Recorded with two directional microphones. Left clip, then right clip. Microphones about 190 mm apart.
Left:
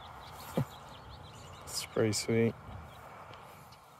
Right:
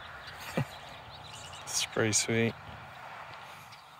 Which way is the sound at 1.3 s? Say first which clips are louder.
Right 6 dB; 55° left (ahead or behind).